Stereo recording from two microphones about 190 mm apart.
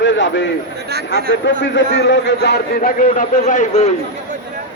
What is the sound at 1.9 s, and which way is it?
A man's voice, 65° left (ahead or behind).